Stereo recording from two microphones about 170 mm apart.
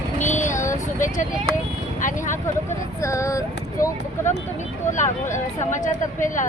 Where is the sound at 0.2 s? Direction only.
45° left (ahead or behind).